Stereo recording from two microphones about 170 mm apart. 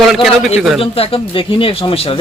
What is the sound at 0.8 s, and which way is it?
Speech, 30° left (ahead or behind).